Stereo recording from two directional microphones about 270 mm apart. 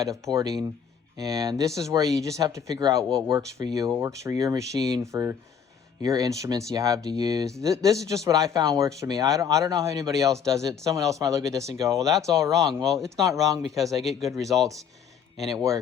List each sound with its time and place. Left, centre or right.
0.1 s speech: centre
12.6 s speech: centre
13.2 s speech: centre
13.6 s speech: centre
15.5 s speech: centre